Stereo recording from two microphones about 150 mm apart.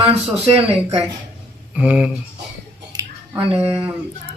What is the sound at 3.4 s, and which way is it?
Speech, 40° right (ahead or behind).